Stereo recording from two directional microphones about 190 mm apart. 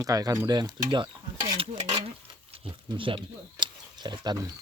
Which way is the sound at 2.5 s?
25° right (ahead or behind).